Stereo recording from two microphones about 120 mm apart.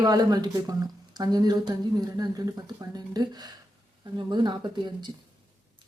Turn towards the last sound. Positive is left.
turn(degrees=-35)  # may be behind; listen again after turning